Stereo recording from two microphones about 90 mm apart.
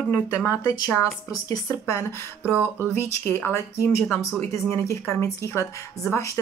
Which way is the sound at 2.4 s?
20° right (ahead or behind).